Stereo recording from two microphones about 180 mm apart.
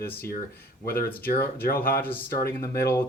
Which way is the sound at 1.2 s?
55° left (ahead or behind).